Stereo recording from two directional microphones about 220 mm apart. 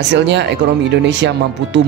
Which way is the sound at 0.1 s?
50° right (ahead or behind).